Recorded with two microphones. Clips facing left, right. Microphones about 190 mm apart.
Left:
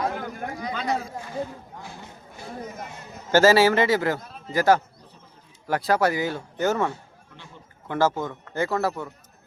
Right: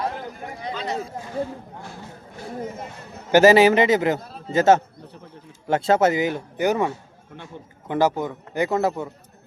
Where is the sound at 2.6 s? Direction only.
30° right (ahead or behind).